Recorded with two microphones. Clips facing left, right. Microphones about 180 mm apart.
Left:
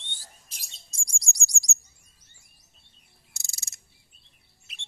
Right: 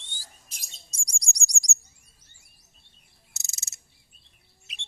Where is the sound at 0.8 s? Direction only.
20° right (ahead or behind).